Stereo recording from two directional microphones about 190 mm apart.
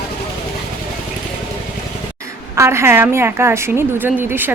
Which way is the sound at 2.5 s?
15° right (ahead or behind).